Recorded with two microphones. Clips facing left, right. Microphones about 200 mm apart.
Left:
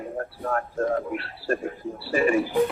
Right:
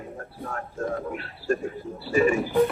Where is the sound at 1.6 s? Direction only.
45° right (ahead or behind).